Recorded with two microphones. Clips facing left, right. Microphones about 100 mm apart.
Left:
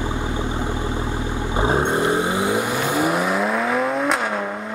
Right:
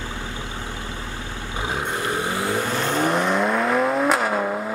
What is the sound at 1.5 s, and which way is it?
Vehicle, 30° left (ahead or behind).